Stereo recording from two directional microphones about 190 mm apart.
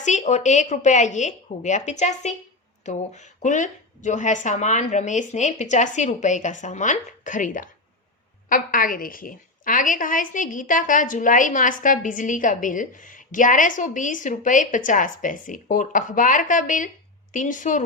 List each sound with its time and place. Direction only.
0.0 s a woman's voice: 40° left (ahead or behind)